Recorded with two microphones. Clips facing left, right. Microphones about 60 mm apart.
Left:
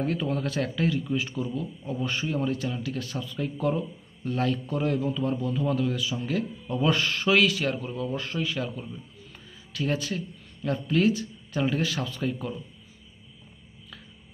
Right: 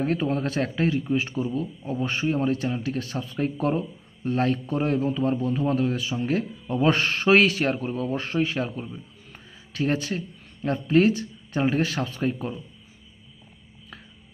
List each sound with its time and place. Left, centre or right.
0.0 s a man's voice: right